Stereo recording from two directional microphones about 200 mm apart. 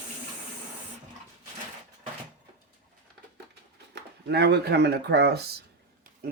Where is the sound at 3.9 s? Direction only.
55° right (ahead or behind).